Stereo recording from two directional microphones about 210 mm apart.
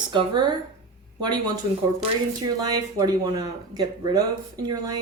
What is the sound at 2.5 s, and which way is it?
A woman's voice, 15° right (ahead or behind).